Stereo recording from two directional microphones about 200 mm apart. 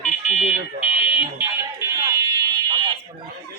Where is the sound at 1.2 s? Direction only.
10° right (ahead or behind).